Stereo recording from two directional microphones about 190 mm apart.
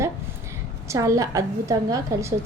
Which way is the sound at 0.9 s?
15° right (ahead or behind).